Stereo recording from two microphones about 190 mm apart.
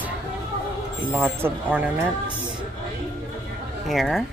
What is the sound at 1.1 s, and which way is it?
Speech, 10° right (ahead or behind).